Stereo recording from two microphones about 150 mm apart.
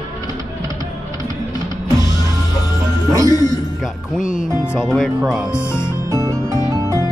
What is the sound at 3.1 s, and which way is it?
Speech, 20° right (ahead or behind).